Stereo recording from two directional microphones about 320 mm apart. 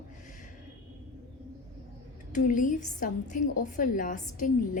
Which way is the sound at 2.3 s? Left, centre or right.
Left.